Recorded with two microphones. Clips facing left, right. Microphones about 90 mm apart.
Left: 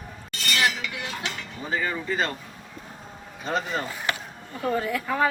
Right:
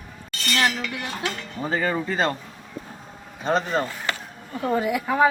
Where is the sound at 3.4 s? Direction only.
40° right (ahead or behind).